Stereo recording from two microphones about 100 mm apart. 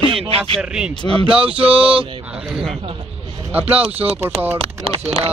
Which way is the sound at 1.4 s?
10° right (ahead or behind).